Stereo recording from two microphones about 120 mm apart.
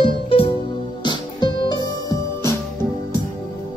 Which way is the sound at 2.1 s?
25° left (ahead or behind).